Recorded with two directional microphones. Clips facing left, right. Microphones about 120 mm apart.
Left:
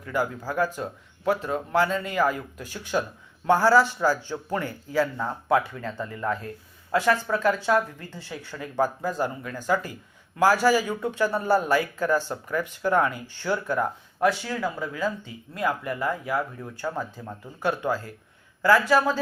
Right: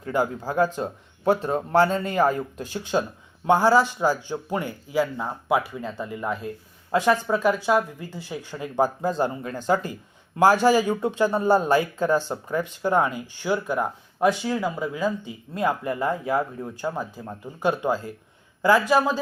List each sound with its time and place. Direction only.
0.0 s a man's voice: 25° right (ahead or behind)